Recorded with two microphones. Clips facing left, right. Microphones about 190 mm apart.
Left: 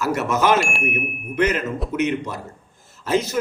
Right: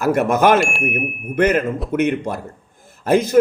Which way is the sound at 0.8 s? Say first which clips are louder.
Right 3 dB; 50° right (ahead or behind).